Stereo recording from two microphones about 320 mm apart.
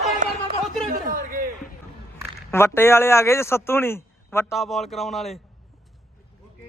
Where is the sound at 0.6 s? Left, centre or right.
Centre.